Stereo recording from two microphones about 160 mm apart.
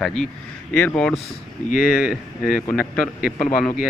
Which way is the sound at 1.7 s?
60° left (ahead or behind).